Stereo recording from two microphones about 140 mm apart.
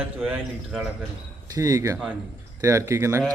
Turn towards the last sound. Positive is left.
turn(degrees=-20)  # may be behind; listen again after turning